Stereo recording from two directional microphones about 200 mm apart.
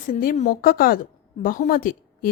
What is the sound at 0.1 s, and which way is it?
A woman's voice, 45° left (ahead or behind).